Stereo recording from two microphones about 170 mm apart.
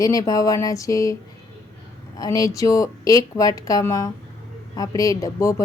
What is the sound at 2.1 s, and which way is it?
Speech, 20° left (ahead or behind).